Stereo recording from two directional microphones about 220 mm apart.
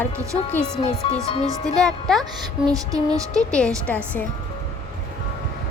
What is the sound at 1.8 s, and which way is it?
Speech, centre (ahead or behind).